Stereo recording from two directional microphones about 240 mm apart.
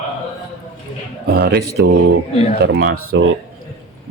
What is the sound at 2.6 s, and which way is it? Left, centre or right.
Speech, right.